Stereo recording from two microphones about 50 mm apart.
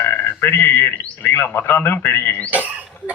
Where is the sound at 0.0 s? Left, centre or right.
Left.